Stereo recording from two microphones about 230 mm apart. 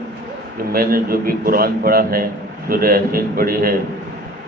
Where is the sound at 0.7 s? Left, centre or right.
Right.